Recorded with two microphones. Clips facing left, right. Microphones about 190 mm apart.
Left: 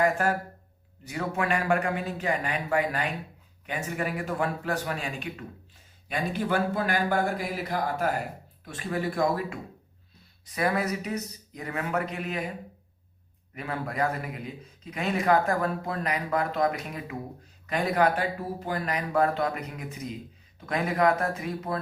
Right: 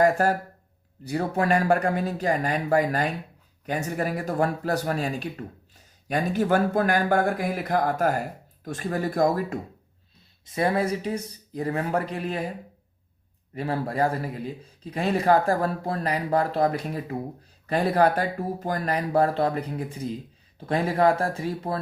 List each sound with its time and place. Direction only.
0.0 s a man's voice: 35° right (ahead or behind)
10.4 s a man's voice: 25° right (ahead or behind)
13.5 s a man's voice: 30° right (ahead or behind)